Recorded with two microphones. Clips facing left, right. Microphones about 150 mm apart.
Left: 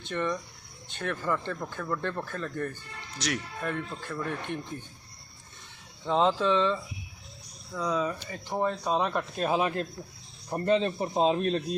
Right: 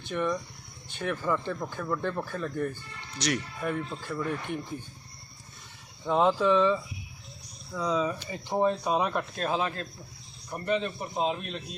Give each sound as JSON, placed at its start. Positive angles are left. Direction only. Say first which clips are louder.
{"t": 0.1, "sound": "speech", "louder": "right 1 dB", "side_deg": -10}
{"t": 3.2, "sound": "speech", "louder": "right 3 dB", "side_deg": 0}
{"t": 3.6, "sound": "speech", "louder": "right 2 dB", "side_deg": -10}
{"t": 6.1, "sound": "speech", "louder": "right 1 dB", "side_deg": -10}
{"t": 7.8, "sound": "speech", "louder": "right 1 dB", "side_deg": -15}
{"t": 10.5, "sound": "a man's voice", "louder": "left 4 dB", "side_deg": 30}